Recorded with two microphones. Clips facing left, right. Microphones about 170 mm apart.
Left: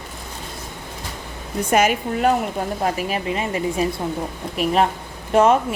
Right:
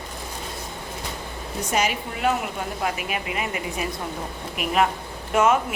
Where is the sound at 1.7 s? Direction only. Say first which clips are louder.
Left 7 dB; 50° left (ahead or behind).